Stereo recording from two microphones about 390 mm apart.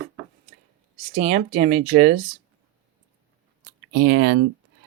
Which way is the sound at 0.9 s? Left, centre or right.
Centre.